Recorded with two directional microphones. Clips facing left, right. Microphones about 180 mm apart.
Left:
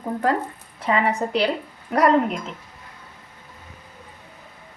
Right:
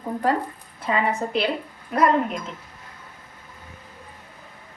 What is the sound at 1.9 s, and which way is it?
Speech, 75° left (ahead or behind).